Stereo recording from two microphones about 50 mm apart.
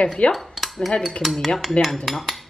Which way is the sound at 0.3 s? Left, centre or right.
Centre.